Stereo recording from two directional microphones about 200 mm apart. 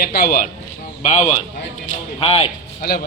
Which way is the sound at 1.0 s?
35° left (ahead or behind).